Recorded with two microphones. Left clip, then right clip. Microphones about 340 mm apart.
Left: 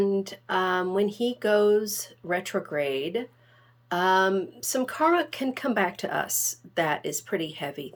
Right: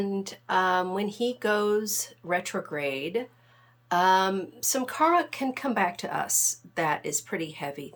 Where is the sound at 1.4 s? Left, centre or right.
Right.